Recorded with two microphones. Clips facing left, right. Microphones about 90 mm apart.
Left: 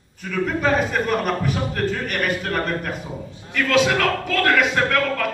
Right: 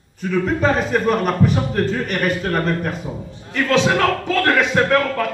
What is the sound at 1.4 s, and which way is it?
Speech, 30° right (ahead or behind).